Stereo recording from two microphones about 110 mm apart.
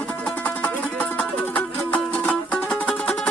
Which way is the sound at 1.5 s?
15° left (ahead or behind).